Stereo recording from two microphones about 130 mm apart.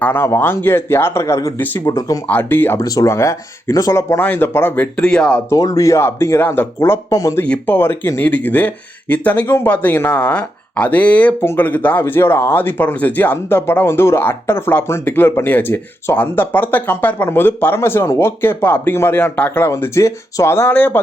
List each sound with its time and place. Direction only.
0.0 s speech: 15° left (ahead or behind)
1.8 s speech: 25° left (ahead or behind)
2.2 s speech: 15° left (ahead or behind)
5.5 s speech: 25° left (ahead or behind)
7.4 s speech: 10° left (ahead or behind)